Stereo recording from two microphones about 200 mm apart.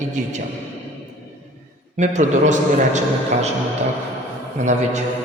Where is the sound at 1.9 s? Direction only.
35° right (ahead or behind).